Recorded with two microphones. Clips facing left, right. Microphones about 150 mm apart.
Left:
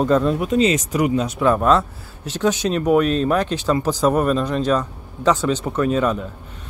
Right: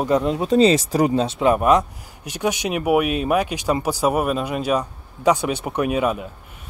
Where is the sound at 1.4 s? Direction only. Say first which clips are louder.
Even; 15° right (ahead or behind).